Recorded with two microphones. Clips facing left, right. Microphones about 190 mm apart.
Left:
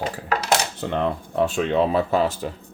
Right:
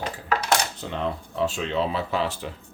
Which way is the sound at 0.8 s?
60° left (ahead or behind).